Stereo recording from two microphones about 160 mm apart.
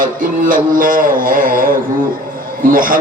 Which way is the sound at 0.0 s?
55° right (ahead or behind).